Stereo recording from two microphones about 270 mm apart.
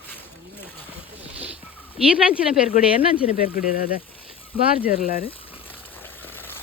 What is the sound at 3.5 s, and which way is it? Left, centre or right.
Speech, left.